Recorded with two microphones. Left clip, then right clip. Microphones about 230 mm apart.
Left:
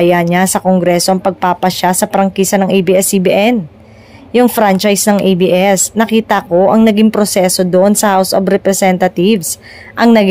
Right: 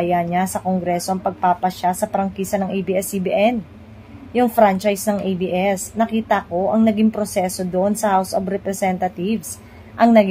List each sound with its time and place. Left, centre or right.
0.0 s a woman's voice: left